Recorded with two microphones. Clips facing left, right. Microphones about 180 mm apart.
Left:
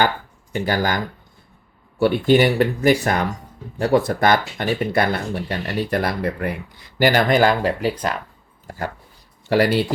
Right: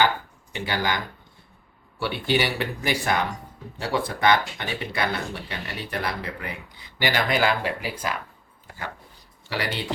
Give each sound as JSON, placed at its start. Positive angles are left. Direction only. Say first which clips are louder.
{"t": 0.5, "sound": "speech", "louder": "left 6 dB", "side_deg": 45}
{"t": 9.5, "sound": "speech", "louder": "left 12 dB", "side_deg": 50}